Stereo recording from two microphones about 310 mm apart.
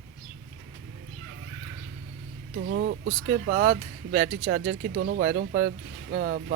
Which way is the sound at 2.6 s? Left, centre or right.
Right.